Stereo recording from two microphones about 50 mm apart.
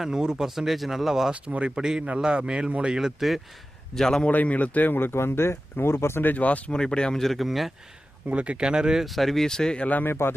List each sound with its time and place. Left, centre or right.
0.0 s speech: centre
1.3 s speech: right
3.2 s speech: centre
3.9 s speech: centre
4.3 s speech: left
6.2 s speech: left
6.7 s speech: centre
8.3 s speech: right
9.0 s speech: centre
9.8 s speech: left
10.1 s a man's voice: left